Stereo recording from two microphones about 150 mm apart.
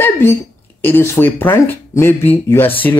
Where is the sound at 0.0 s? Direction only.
15° left (ahead or behind).